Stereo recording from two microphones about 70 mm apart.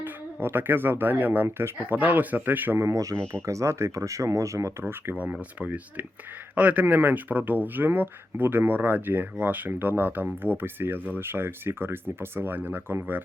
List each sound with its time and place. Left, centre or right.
0.4 s speech: right
2.0 s speech: right
2.7 s speech: right
4.8 s speech: right